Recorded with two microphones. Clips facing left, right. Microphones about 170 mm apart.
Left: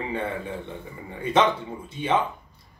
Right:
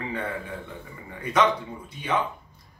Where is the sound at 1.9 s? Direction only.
25° left (ahead or behind).